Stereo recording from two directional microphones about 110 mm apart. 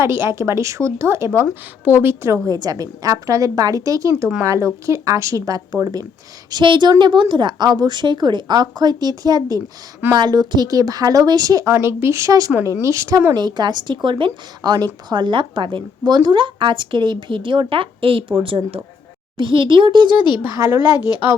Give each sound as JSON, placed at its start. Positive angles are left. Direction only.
{"t": 0.0, "sound": "a woman's voice", "side_deg": -25}
{"t": 11.7, "sound": "speech", "side_deg": -25}
{"t": 13.3, "sound": "a woman's voice", "side_deg": -40}
{"t": 20.1, "sound": "speech", "side_deg": 45}
{"t": 20.6, "sound": "speech", "side_deg": -20}